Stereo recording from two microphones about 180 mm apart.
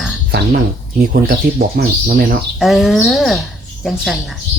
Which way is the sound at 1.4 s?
55° right (ahead or behind).